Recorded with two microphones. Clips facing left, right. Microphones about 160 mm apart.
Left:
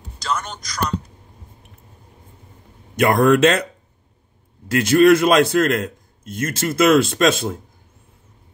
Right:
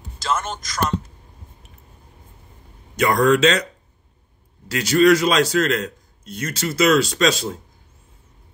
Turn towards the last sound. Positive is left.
turn(degrees=50)  # may be behind; listen again after turning